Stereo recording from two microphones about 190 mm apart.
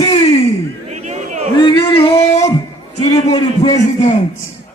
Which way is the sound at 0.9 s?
35° right (ahead or behind).